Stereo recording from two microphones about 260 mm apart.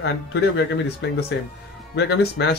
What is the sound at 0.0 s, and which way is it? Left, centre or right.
A man's voice, left.